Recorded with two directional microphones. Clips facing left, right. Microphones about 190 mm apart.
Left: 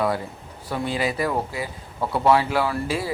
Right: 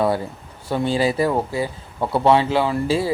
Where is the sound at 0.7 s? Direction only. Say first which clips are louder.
Right 5 dB; 30° right (ahead or behind).